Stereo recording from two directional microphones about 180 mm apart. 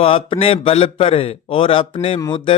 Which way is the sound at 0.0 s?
30° left (ahead or behind).